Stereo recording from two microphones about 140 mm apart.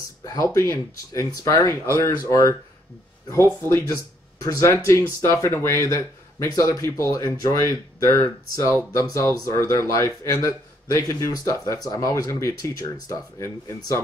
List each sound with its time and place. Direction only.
0.2 s a man's voice: 25° left (ahead or behind)